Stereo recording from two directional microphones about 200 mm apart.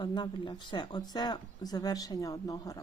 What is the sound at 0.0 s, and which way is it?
Speech, 20° left (ahead or behind).